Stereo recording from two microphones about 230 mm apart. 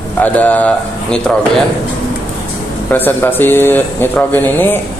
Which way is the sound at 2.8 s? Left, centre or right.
Centre.